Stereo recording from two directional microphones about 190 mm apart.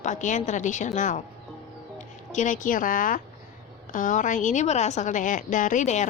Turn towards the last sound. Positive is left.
turn(degrees=40)  # may be behind; listen again after turning